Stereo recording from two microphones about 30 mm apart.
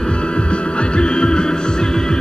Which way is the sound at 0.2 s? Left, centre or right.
Left.